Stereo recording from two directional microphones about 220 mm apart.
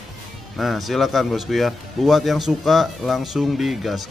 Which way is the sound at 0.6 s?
Centre (ahead or behind).